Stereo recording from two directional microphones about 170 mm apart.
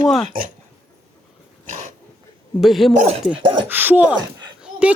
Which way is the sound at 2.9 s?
45° right (ahead or behind).